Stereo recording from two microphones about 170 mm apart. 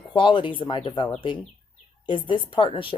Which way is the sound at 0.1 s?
30° left (ahead or behind).